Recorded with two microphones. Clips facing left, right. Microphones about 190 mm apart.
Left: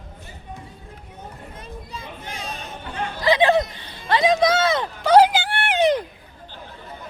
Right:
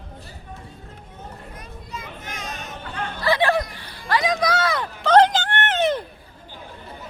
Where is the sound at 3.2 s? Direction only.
20° left (ahead or behind).